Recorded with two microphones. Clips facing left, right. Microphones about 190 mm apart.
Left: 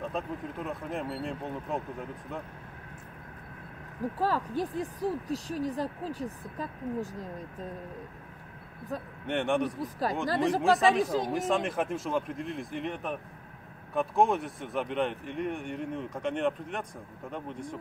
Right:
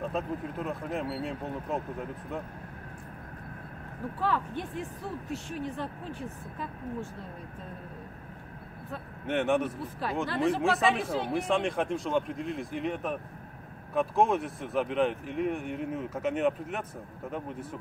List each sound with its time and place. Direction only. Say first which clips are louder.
0.0 s speech: right 2 dB; centre (ahead or behind)
4.0 s speech: left 1 dB; 40° left (ahead or behind)
9.2 s speech: right 2 dB; centre (ahead or behind)
9.8 s speech: left 1 dB; 40° left (ahead or behind)
11.3 s speech: right 3 dB; centre (ahead or behind)